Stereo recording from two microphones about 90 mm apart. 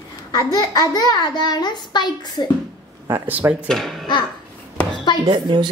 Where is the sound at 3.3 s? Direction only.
20° right (ahead or behind).